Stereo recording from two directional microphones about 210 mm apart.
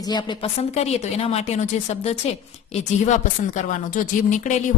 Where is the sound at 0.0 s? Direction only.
20° left (ahead or behind).